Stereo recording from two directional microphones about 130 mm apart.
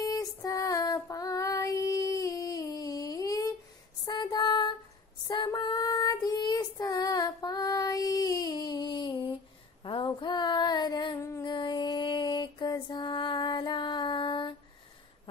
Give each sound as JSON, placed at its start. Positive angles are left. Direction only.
{"t": 0.0, "sound": "child singing", "side_deg": 25}
{"t": 4.0, "sound": "a sound", "side_deg": 30}
{"t": 5.3, "sound": "child singing", "side_deg": 35}
{"t": 9.8, "sound": "a sound", "side_deg": 40}
{"t": 11.1, "sound": "music", "side_deg": 20}
{"t": 11.4, "sound": "mantra", "side_deg": 35}